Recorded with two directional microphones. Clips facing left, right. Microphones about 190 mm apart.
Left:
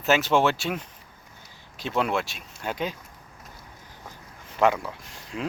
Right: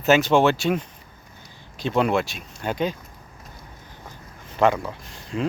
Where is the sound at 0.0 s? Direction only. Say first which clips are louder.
Right 4 dB; centre (ahead or behind).